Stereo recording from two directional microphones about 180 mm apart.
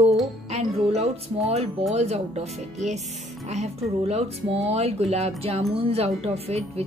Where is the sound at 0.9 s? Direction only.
35° right (ahead or behind).